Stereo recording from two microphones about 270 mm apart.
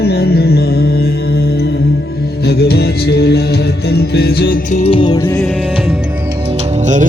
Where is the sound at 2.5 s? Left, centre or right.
Left; by 5.4 s centre.